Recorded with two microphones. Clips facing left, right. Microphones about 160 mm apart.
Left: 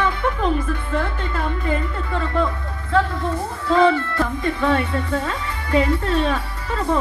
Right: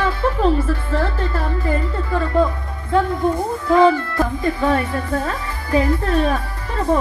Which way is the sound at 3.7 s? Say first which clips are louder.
Right 2 dB; 25° right (ahead or behind).